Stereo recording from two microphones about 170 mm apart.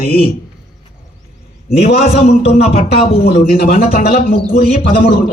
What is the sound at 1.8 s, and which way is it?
A man's voice, 65° left (ahead or behind).